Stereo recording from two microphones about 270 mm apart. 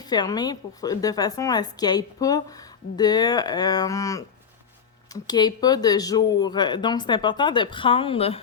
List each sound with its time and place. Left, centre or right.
0.0 s speech: centre